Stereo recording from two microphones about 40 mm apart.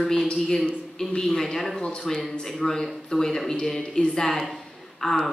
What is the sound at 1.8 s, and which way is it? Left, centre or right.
Speech, centre.